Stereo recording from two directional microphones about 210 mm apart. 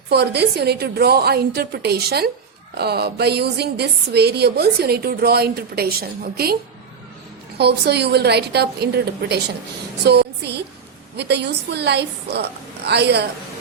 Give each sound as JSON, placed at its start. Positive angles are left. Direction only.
{"t": 0.1, "sound": "speech", "side_deg": -50}
{"t": 7.6, "sound": "speech", "side_deg": -50}